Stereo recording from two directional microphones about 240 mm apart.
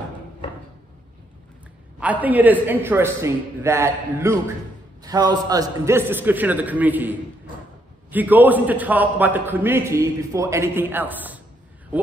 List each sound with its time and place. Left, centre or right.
2.0 s a man's voice: centre